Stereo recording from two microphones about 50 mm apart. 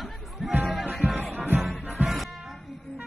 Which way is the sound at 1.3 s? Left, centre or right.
Right.